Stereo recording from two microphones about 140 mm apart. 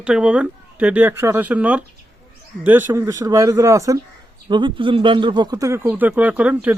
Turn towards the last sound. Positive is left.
turn(degrees=-10)  # may be behind; listen again after turning